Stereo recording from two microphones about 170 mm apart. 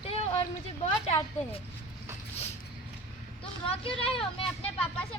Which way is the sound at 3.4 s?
30° left (ahead or behind).